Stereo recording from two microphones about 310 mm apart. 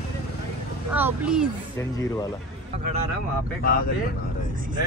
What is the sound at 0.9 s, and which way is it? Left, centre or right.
Speech, centre.